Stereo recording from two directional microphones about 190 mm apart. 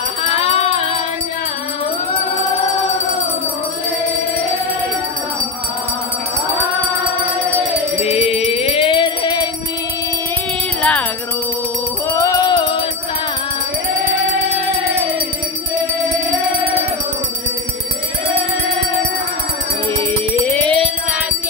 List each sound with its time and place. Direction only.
0.2 s music: 30° left (ahead or behind)
8.0 s music: 30° left (ahead or behind)
10.8 s music: 5° left (ahead or behind)
12.2 s music: 20° left (ahead or behind)
14.0 s music: 40° right (ahead or behind)
16.5 s music: 30° right (ahead or behind)
20.0 s music: 10° left (ahead or behind)